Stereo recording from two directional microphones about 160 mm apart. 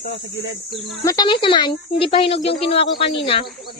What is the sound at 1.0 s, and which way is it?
A woman's voice, 25° left (ahead or behind).